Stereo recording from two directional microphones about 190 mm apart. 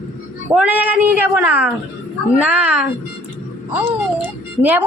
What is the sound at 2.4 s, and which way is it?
Speech, 5° right (ahead or behind).